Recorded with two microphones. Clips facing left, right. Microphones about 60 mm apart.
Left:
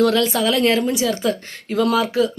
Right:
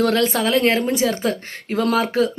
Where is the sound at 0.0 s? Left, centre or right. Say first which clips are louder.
Left 1 dB; right.